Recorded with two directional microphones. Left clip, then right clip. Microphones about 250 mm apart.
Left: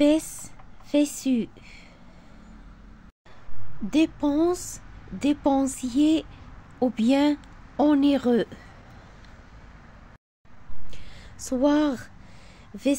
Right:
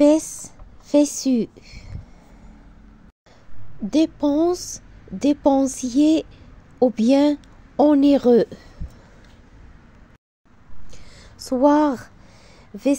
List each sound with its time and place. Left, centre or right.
0.0 s speech: centre
3.9 s a woman's voice: centre
10.9 s a sound: centre